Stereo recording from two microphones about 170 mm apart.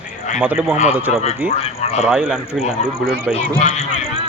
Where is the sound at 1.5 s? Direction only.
40° left (ahead or behind).